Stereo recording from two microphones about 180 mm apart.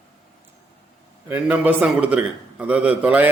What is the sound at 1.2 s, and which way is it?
A man's voice, 10° right (ahead or behind).